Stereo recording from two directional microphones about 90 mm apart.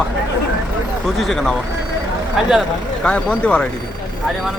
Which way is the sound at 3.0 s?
10° left (ahead or behind).